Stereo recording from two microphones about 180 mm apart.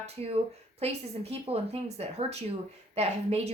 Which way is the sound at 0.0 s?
35° right (ahead or behind).